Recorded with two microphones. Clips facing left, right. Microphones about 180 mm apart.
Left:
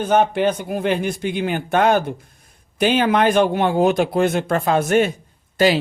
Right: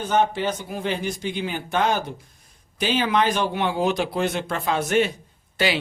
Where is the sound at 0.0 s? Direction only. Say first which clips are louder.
Left 5 dB; 60° left (ahead or behind).